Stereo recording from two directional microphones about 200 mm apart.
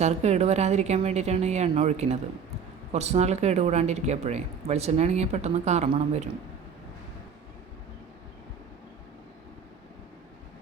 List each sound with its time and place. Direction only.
0.0 s speech: 35° right (ahead or behind)